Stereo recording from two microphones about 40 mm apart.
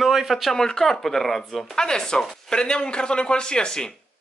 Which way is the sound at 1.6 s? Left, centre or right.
Centre.